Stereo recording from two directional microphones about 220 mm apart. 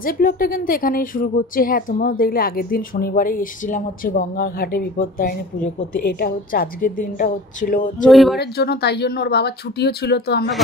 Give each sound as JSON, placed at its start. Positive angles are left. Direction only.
{"t": 0.0, "sound": "a woman's voice", "side_deg": 40}
{"t": 8.1, "sound": "speech", "side_deg": 0}
{"t": 8.4, "sound": "speech", "side_deg": 45}